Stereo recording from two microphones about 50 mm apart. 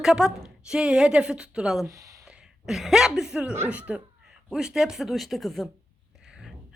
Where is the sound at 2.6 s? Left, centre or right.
Centre.